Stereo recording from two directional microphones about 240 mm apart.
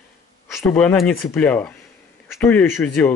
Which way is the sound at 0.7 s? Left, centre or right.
Centre.